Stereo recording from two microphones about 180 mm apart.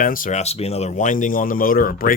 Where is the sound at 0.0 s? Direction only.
50° left (ahead or behind).